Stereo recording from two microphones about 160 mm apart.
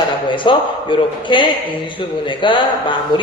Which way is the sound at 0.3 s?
30° left (ahead or behind).